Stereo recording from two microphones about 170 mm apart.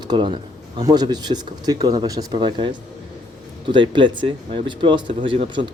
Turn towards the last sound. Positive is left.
turn(degrees=-30)  # may be behind; listen again after turning